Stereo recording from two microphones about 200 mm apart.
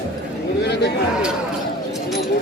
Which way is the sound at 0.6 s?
55° left (ahead or behind).